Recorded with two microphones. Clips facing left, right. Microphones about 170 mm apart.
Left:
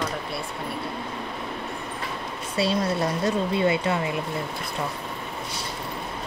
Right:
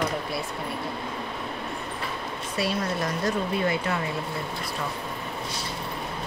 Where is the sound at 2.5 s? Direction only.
30° left (ahead or behind).